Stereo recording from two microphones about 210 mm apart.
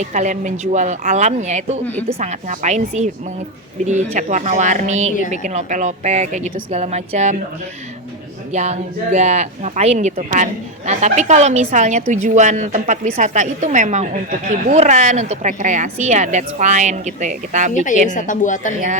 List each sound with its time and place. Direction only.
0.0 s a woman's voice: 35° right (ahead or behind)
8.5 s a woman's voice: 30° right (ahead or behind)
18.1 s a woman's voice: 35° left (ahead or behind)